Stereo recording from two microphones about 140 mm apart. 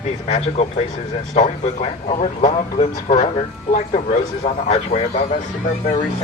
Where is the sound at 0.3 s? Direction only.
50° left (ahead or behind).